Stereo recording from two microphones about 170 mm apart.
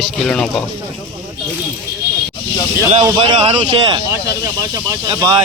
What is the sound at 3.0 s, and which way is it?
A man's voice, 25° right (ahead or behind).